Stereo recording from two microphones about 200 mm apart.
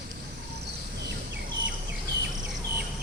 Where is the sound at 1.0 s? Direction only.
60° right (ahead or behind).